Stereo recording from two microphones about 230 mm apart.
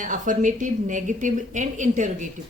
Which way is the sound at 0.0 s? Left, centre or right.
Right.